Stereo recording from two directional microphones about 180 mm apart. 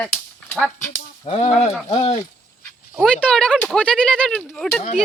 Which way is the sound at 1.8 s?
30° left (ahead or behind).